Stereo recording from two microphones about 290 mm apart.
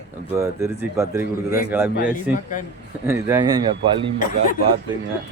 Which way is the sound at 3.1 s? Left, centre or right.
Centre.